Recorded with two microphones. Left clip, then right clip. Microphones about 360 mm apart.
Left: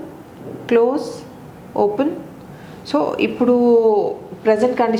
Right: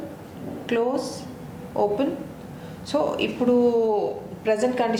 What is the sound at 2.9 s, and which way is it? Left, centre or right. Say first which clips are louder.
A woman's voice: left 5 dB; left.